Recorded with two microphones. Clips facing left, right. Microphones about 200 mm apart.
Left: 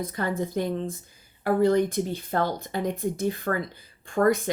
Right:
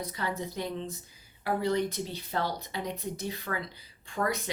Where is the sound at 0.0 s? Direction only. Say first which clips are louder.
Left 6 dB; 50° left (ahead or behind).